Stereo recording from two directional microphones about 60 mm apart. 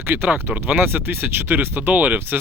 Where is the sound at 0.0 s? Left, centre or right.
Right.